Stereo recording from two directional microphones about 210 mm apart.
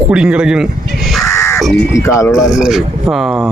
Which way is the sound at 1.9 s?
15° left (ahead or behind).